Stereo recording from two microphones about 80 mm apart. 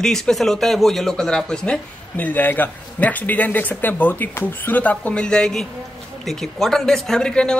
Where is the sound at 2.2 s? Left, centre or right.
Left.